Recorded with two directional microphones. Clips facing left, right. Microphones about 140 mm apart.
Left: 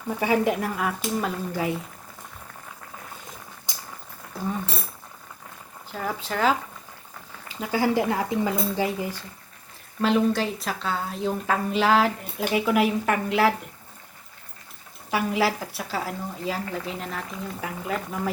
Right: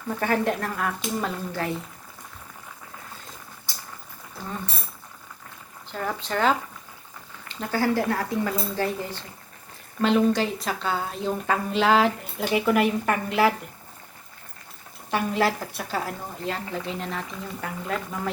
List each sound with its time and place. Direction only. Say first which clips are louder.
0.1 s speech: left 2 dB; 10° left (ahead or behind)
3.7 s boiling: left 1 dB; 20° left (ahead or behind)
5.9 s a woman's voice: right 1 dB; 5° left (ahead or behind)
15.1 s a woman's voice: even; 5° left (ahead or behind)